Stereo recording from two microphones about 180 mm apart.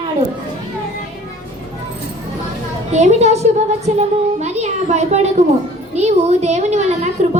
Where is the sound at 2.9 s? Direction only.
40° right (ahead or behind).